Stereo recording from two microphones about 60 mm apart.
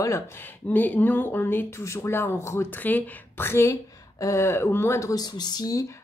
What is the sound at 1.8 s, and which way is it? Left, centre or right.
Speech, left.